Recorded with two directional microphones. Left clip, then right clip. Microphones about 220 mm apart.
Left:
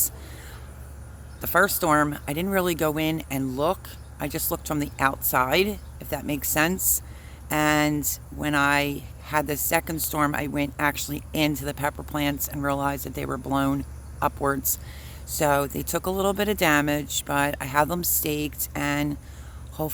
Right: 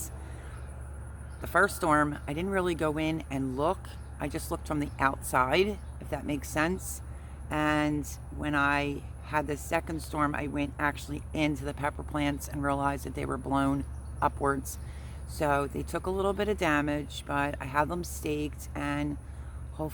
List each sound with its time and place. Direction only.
1.4 s speech: 25° left (ahead or behind)